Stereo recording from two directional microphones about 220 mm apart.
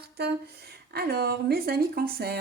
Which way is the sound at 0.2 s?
45° right (ahead or behind).